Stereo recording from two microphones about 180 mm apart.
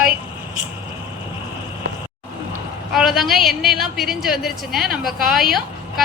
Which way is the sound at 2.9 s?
Centre (ahead or behind).